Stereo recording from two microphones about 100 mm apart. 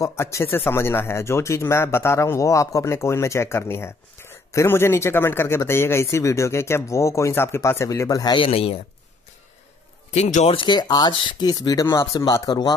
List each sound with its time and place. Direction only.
0.0 s a man's voice: 30° left (ahead or behind)
8.4 s a man's voice: 70° left (ahead or behind)
10.1 s speech: 80° left; by 12.4 s 30° left (ahead or behind)
12.4 s speech: 45° left (ahead or behind)